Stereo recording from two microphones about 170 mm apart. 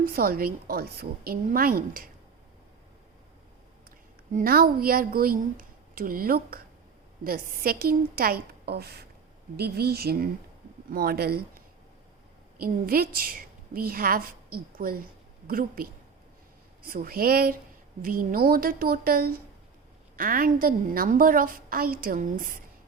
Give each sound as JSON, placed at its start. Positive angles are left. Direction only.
{"t": 0.0, "sound": "a woman's voice", "side_deg": -60}
{"t": 4.3, "sound": "a woman's voice", "side_deg": -55}
{"t": 12.5, "sound": "a woman's voice", "side_deg": -60}